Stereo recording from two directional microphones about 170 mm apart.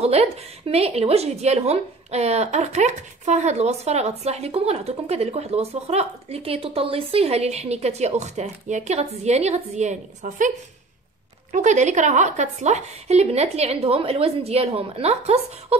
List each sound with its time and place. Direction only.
0.0 s a woman's voice: 35° right (ahead or behind)
11.5 s a woman's voice: 45° right (ahead or behind)